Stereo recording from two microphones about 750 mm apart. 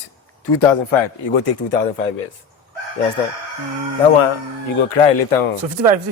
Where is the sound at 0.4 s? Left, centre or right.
Left.